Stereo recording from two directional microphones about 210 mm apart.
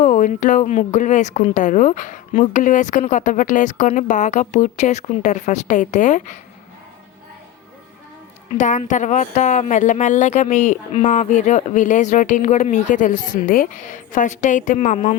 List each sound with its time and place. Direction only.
0.0 s speech: 40° left (ahead or behind)
8.5 s speech: 35° left (ahead or behind)